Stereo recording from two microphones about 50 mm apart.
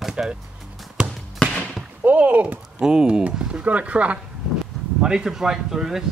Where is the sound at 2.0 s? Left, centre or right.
Right.